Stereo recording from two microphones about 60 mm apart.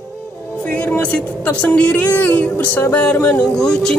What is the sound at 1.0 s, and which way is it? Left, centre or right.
Speech, left.